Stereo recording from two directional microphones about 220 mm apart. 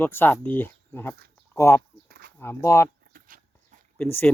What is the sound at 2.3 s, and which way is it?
Speech, 10° left (ahead or behind).